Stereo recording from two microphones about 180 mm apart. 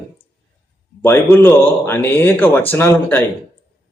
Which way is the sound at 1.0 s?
10° left (ahead or behind).